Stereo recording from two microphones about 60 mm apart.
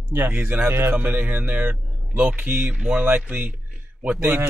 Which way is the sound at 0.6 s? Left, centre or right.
Right.